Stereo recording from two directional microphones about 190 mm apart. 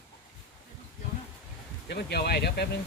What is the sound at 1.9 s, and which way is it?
Speech, 60° left (ahead or behind).